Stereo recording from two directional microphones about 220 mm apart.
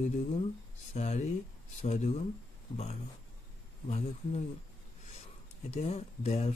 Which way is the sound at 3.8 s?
30° left (ahead or behind).